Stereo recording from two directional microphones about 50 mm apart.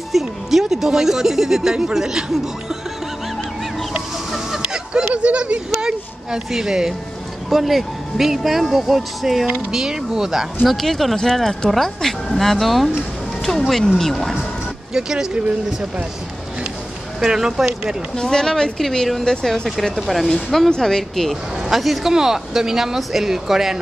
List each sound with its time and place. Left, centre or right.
0.1 s speech: centre
5.1 s speech: right
10.7 s speech: centre
15.0 s speech: centre
17.2 s speech: centre
18.1 s speech: centre